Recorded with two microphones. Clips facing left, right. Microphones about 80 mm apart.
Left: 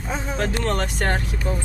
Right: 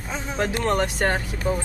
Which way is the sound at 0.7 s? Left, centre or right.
Centre.